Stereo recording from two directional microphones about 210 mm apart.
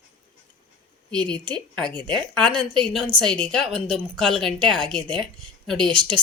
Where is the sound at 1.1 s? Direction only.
5° left (ahead or behind).